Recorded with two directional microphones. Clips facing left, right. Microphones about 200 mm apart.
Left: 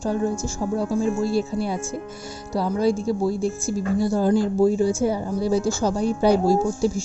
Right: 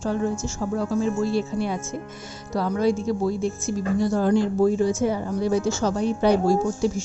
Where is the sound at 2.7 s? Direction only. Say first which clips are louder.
Left 1 dB; 35° left (ahead or behind).